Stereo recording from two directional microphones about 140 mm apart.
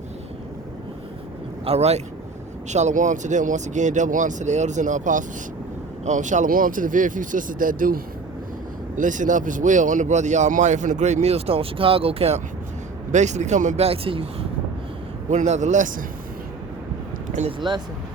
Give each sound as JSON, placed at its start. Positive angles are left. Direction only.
{"t": 1.6, "sound": "a man's voice", "side_deg": -50}
{"t": 9.0, "sound": "a man's voice", "side_deg": -65}
{"t": 13.1, "sound": "a man's voice", "side_deg": -55}
{"t": 13.8, "sound": "speech", "side_deg": -40}
{"t": 15.3, "sound": "a man's voice", "side_deg": -55}